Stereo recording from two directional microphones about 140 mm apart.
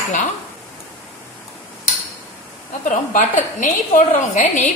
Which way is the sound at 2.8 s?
70° left (ahead or behind).